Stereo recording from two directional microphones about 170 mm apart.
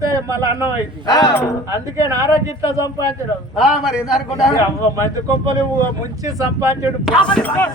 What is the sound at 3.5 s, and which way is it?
Speech, 5° right (ahead or behind).